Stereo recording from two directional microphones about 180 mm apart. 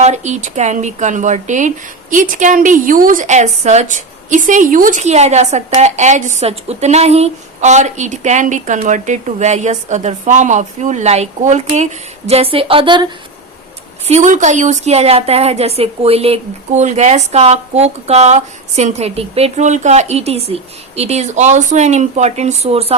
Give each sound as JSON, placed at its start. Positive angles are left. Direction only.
{"t": 0.0, "sound": "speech", "side_deg": -40}
{"t": 14.1, "sound": "speech", "side_deg": -40}